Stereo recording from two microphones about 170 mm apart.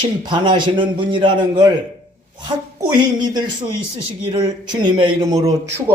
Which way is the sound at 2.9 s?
25° right (ahead or behind).